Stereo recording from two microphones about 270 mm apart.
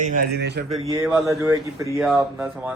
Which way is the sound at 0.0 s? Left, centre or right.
Right.